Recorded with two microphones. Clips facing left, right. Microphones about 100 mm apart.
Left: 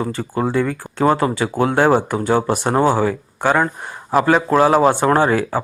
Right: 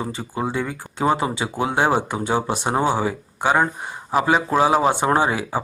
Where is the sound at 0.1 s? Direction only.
15° right (ahead or behind).